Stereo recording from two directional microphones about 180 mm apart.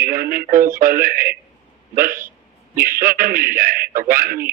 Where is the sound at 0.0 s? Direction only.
55° right (ahead or behind).